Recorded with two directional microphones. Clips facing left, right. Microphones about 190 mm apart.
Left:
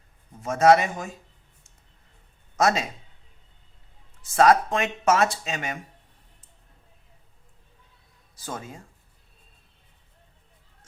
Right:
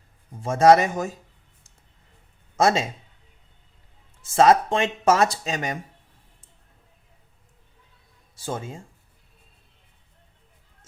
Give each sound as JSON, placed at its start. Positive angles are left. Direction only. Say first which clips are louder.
{"t": 0.4, "sound": "speech", "louder": "right 2 dB", "side_deg": -30}
{"t": 2.6, "sound": "speech", "louder": "right 2 dB", "side_deg": -25}
{"t": 4.3, "sound": "speech", "louder": "right 2 dB", "side_deg": -25}
{"t": 8.4, "sound": "speech", "louder": "right 5 dB", "side_deg": -25}